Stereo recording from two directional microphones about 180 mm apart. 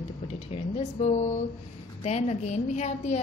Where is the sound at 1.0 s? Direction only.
35° left (ahead or behind).